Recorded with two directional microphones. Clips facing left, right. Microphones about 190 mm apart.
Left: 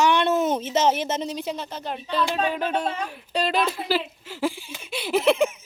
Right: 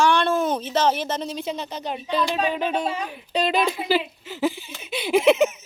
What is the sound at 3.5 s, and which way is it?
Speech, 10° right (ahead or behind).